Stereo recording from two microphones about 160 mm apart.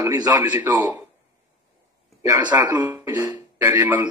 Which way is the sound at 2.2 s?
15° right (ahead or behind).